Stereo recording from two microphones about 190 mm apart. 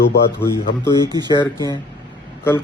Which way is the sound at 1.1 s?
20° right (ahead or behind).